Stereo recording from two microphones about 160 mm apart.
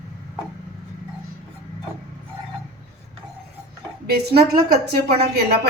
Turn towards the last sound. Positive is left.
turn(degrees=-75)  # may be behind; listen again after turning